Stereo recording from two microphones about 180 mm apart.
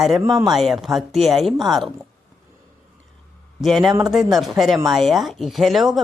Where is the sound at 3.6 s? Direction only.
Centre (ahead or behind).